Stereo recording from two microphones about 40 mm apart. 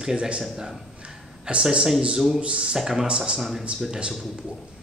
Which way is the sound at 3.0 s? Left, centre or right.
Right.